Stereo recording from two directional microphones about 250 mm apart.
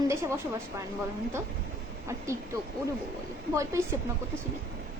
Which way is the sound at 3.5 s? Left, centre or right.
Centre.